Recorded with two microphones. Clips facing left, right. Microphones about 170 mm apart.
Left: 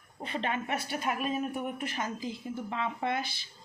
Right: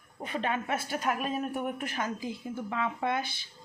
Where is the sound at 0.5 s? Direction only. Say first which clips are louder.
Right 1 dB; 45° right (ahead or behind).